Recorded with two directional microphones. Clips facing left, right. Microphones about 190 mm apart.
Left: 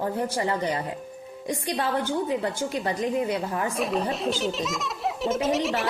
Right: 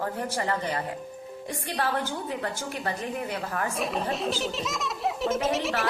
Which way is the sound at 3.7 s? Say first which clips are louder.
Left 3 dB; centre (ahead or behind).